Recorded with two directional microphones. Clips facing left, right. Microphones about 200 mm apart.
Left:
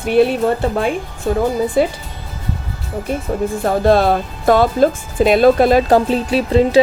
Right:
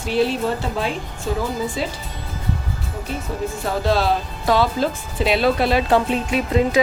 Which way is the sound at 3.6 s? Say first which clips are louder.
Left 6 dB; 55° left (ahead or behind).